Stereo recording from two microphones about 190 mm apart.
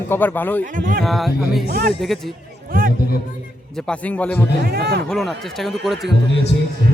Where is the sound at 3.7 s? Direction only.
5° left (ahead or behind).